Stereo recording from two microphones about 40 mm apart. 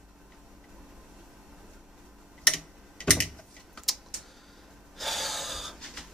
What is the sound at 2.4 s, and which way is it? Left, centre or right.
Tick-tock, centre.